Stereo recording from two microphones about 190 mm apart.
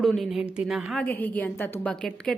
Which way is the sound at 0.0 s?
Centre (ahead or behind).